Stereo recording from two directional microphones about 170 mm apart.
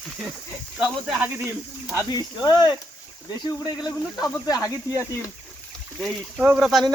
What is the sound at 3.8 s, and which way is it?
Speech, 20° left (ahead or behind).